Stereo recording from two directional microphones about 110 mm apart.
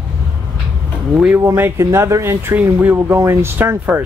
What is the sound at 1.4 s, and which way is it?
Speech, 25° right (ahead or behind).